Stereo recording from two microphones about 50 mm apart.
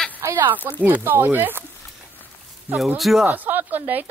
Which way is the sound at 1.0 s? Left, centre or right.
Right.